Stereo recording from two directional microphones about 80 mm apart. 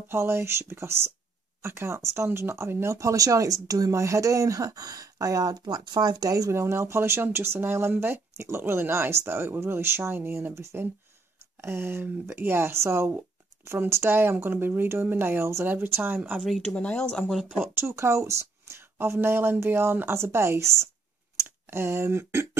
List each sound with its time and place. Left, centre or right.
0.1 s speech: right
16.2 s a woman's voice: centre
16.6 s speech: centre
17.7 s speech: right